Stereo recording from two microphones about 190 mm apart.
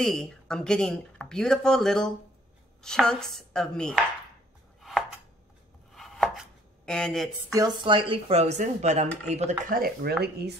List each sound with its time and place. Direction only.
0.0 s speech: 5° left (ahead or behind)
4.8 s chopping: centre (ahead or behind)
6.9 s speech: 5° left (ahead or behind)
7.5 s speech: 25° right (ahead or behind); by 10.5 s 55° right (ahead or behind)